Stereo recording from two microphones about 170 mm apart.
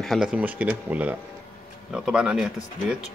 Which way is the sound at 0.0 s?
Centre (ahead or behind).